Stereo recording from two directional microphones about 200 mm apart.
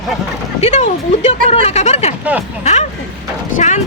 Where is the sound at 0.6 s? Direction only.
35° left (ahead or behind).